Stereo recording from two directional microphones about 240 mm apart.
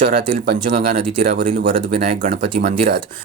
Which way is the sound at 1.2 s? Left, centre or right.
Right.